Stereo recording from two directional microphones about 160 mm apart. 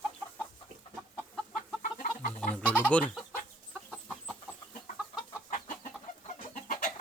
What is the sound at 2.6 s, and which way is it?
Chicken, 10° left (ahead or behind).